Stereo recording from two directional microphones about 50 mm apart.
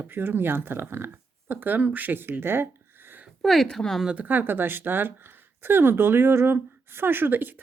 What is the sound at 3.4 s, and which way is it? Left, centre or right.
Speech, centre.